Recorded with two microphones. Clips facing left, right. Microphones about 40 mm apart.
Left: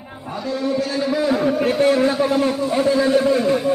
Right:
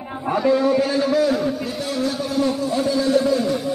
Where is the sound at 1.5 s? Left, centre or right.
Left.